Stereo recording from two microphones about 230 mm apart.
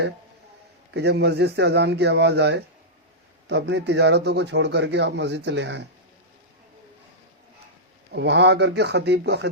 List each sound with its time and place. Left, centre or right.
0.9 s a man's voice: right
8.1 s a man's voice: right